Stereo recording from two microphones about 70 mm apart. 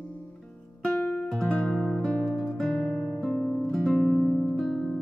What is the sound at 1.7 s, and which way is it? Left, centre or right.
Music, centre.